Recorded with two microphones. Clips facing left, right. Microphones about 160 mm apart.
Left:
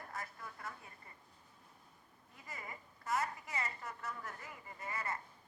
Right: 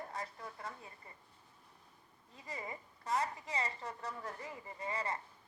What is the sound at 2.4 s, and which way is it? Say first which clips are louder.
A woman's voice: right 5 dB; 25° right (ahead or behind).